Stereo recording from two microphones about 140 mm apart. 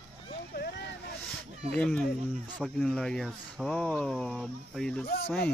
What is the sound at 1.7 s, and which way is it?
Speech, 5° left (ahead or behind).